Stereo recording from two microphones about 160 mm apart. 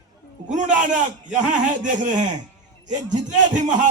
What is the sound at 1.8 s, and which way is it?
Speech, 50° right (ahead or behind).